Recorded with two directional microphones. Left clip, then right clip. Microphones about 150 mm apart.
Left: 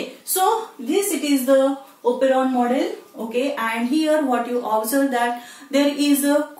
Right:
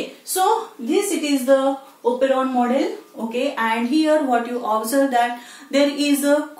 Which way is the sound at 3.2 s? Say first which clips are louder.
Right 1 dB; 15° right (ahead or behind).